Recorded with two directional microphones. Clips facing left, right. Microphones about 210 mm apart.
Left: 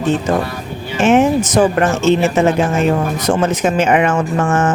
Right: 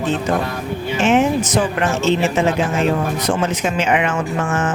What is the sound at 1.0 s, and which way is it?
Speech, 45° left (ahead or behind).